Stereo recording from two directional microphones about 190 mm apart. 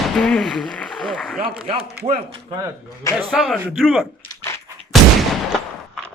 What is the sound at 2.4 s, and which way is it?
Speech, 20° right (ahead or behind).